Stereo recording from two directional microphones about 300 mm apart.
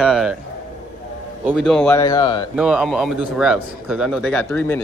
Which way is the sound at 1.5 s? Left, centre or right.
Centre.